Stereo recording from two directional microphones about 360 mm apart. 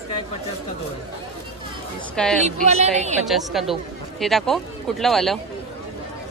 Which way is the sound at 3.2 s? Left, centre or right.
Centre.